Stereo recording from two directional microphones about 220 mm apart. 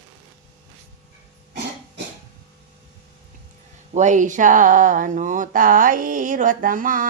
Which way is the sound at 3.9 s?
35° right (ahead or behind).